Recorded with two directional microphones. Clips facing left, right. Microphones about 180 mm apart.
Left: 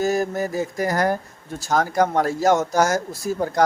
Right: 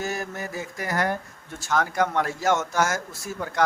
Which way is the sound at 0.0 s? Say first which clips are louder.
Left 9 dB; 35° left (ahead or behind).